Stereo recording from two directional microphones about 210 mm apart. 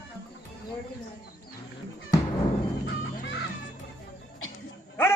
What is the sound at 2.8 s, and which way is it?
Music, 55° left (ahead or behind).